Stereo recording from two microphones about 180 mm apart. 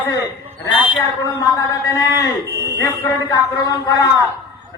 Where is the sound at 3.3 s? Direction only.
20° left (ahead or behind).